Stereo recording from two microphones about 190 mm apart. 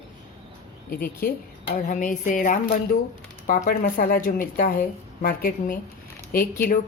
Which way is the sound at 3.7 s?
50° left (ahead or behind).